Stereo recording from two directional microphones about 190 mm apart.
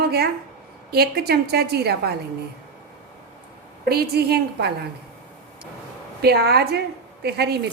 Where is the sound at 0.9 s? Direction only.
55° right (ahead or behind).